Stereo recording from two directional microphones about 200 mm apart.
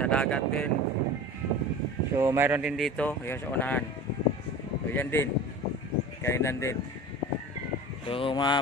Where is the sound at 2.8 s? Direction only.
5° left (ahead or behind).